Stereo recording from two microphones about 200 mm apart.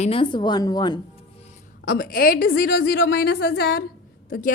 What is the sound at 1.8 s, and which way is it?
A woman's voice, 45° left (ahead or behind).